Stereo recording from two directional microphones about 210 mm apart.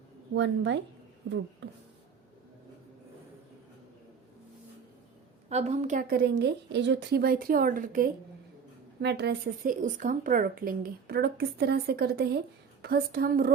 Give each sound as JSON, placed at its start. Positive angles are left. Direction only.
{"t": 0.3, "sound": "speech", "side_deg": -60}
{"t": 5.5, "sound": "a woman's voice", "side_deg": -30}
{"t": 9.0, "sound": "a woman's voice", "side_deg": -50}
{"t": 9.8, "sound": "a woman's voice", "side_deg": -40}